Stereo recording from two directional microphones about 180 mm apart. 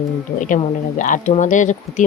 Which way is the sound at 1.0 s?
45° left (ahead or behind).